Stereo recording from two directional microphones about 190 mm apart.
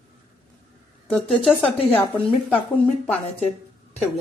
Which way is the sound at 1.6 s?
30° left (ahead or behind).